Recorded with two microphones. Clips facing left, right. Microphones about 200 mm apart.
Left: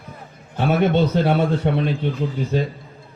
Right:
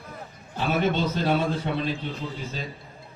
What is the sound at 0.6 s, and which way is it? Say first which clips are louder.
A man's voice: left 6 dB; 60° left (ahead or behind).